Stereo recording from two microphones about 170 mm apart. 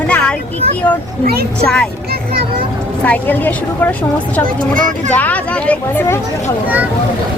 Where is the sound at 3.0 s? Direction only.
10° left (ahead or behind).